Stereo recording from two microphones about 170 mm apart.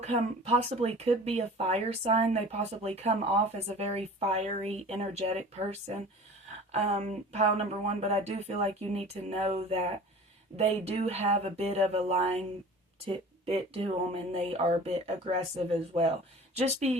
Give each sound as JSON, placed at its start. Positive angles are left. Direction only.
{"t": 0.0, "sound": "speech", "side_deg": -40}
{"t": 6.7, "sound": "speech", "side_deg": -40}